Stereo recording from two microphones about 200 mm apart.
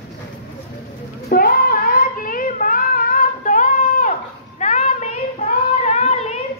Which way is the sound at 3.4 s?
40° left (ahead or behind).